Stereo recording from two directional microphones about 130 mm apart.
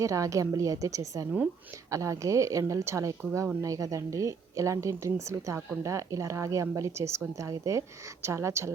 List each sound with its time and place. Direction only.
0.0 s speech: 25° right (ahead or behind)